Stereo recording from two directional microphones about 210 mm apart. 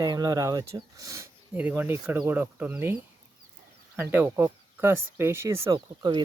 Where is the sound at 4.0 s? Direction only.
10° right (ahead or behind).